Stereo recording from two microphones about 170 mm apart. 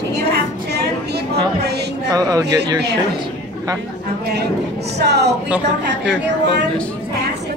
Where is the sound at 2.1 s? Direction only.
20° right (ahead or behind).